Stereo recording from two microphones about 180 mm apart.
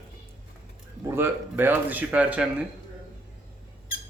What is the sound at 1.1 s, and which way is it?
Speech, 15° right (ahead or behind).